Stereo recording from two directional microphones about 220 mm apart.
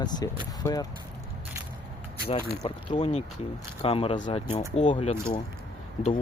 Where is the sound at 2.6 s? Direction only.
30° left (ahead or behind).